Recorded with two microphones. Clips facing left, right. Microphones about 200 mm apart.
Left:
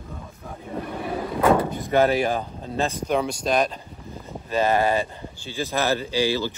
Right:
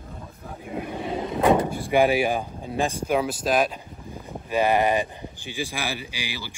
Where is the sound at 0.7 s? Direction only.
10° right (ahead or behind).